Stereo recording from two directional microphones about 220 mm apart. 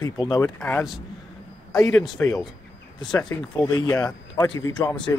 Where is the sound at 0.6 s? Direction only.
5° left (ahead or behind).